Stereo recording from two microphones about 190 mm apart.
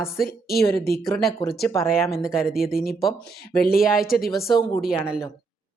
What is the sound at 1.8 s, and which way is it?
Speech, centre (ahead or behind).